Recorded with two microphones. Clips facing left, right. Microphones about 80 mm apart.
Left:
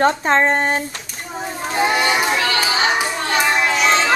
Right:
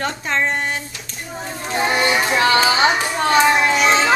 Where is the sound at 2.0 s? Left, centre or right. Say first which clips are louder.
Even; centre.